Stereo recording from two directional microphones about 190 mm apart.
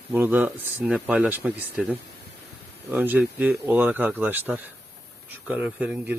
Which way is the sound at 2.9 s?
10° right (ahead or behind).